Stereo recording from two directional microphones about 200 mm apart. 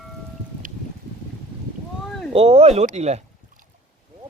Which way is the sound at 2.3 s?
30° right (ahead or behind).